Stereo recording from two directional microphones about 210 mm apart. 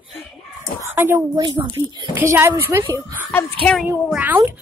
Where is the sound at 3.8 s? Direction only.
10° right (ahead or behind).